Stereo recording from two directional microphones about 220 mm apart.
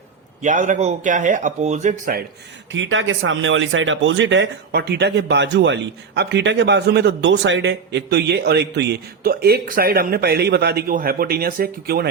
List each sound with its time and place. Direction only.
0.4 s speech: 35° right (ahead or behind)
2.7 s speech: 60° right (ahead or behind); by 12.0 s 45° right (ahead or behind)